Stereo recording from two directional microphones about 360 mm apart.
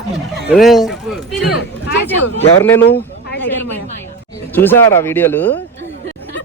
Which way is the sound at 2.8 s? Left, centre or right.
Left.